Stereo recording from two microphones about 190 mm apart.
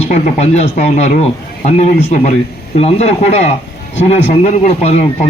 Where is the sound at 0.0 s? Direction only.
35° left (ahead or behind).